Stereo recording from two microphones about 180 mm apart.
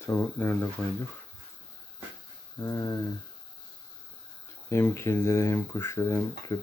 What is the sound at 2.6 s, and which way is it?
Speech, 15° left (ahead or behind).